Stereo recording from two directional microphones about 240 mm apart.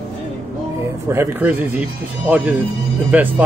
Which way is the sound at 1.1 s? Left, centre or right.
Centre.